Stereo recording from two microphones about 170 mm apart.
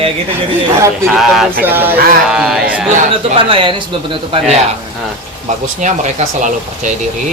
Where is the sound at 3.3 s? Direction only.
30° right (ahead or behind).